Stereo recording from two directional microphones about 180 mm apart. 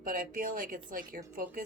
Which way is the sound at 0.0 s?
50° right (ahead or behind).